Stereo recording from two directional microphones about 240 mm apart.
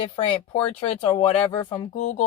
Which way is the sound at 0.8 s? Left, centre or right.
Left.